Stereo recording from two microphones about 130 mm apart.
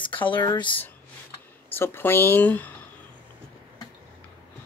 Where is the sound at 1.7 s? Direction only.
15° left (ahead or behind).